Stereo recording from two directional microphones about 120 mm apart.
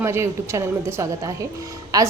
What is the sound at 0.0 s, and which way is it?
A woman's voice, 20° right (ahead or behind).